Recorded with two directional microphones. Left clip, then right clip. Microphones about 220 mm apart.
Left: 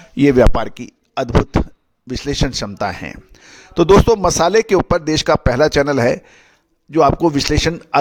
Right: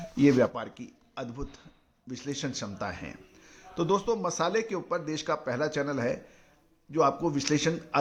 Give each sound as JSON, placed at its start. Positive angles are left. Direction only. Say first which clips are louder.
{"t": 0.2, "sound": "a man's voice", "louder": "left 12 dB", "side_deg": 50}